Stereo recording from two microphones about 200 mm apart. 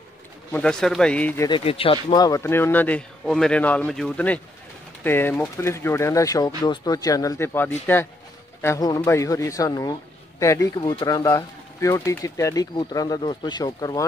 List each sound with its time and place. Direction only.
0.5 s speech: 5° left (ahead or behind)
1.5 s speech: 30° left (ahead or behind)